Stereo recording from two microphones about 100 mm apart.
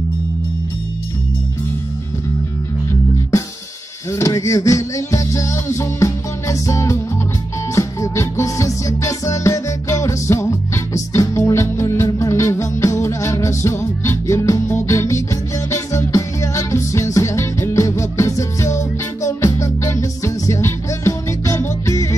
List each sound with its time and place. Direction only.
4.1 s music: 30° left (ahead or behind)